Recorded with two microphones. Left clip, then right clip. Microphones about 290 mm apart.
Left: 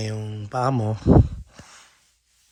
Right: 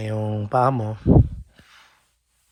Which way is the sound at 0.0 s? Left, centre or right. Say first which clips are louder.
Right 6 dB; centre.